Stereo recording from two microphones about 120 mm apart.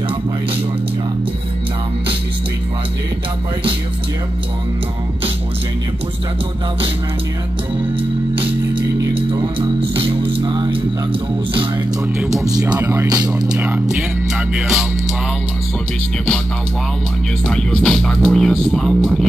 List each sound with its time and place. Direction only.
9.1 s music: 45° right (ahead or behind)
12.3 s speech: 30° right (ahead or behind)
14.5 s speech: 5° right (ahead or behind)
17.5 s speech: 5° left (ahead or behind)